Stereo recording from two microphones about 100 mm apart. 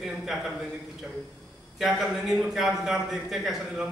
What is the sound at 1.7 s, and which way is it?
A man's voice, 5° right (ahead or behind).